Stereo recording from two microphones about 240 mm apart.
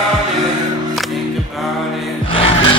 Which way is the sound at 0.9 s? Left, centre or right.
Centre.